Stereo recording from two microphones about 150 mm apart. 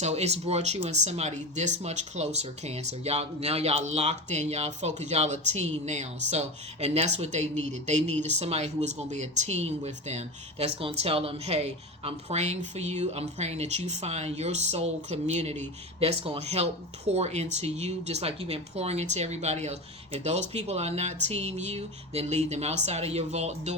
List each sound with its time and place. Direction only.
0.0 s speech: 45° right (ahead or behind)